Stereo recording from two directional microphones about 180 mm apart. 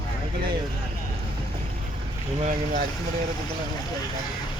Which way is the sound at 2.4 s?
40° right (ahead or behind).